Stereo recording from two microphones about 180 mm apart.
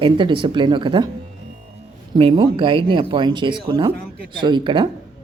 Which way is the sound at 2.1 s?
30° right (ahead or behind).